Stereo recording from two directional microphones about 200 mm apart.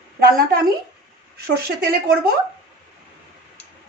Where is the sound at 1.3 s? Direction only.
50° right (ahead or behind).